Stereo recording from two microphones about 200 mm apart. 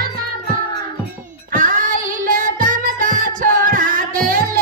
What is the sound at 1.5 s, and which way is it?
Music, 40° right (ahead or behind).